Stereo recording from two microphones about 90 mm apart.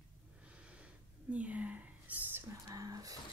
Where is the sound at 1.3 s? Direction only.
15° right (ahead or behind).